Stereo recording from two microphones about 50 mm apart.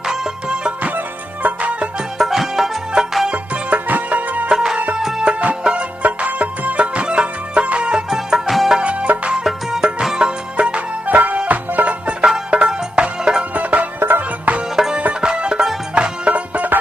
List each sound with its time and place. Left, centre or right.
0.1 s music: centre
2.1 s music: centre
3.3 s music: right
4.5 s music: centre
5.2 s music: right; by 8.8 s centre
8.8 s music: right
9.4 s music: centre
13.5 s music: right
14.0 s music: right
14.9 s music: centre; by 16.8 s right